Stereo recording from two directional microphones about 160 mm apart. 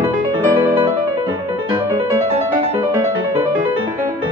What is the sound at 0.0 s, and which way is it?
Music, 10° right (ahead or behind).